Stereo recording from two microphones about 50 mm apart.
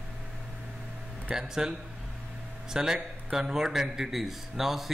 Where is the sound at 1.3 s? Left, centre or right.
Centre.